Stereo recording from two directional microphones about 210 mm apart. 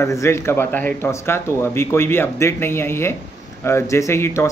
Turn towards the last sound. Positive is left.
turn(degrees=10)  # may be behind; listen again after turning